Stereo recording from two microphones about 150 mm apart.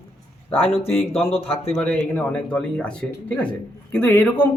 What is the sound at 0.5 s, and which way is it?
Speech, 40° left (ahead or behind).